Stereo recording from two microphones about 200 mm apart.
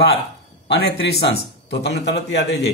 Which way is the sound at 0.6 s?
55° left (ahead or behind).